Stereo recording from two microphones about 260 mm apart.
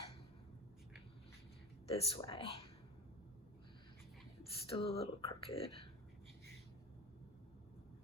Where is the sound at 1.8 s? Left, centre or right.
Centre.